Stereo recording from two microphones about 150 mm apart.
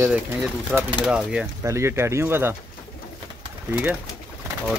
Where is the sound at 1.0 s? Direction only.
5° right (ahead or behind).